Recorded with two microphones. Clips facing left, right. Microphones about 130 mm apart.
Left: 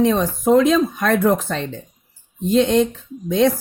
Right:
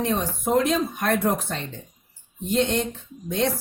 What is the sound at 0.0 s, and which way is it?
Speech, 90° left.